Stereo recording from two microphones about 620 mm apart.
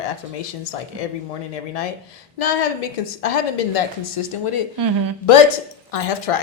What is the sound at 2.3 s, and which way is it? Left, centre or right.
A woman's voice, left.